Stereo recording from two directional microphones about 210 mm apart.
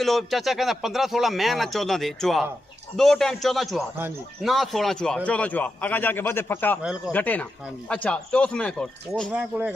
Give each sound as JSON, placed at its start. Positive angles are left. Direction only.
{"t": 0.0, "sound": "a man's voice", "side_deg": 0}